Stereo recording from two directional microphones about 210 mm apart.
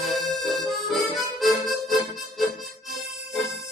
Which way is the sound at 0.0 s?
Centre (ahead or behind).